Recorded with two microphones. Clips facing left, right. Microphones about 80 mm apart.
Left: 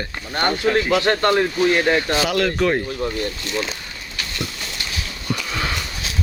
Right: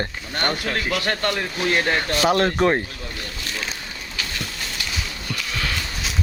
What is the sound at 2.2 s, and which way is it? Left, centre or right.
Speech, right.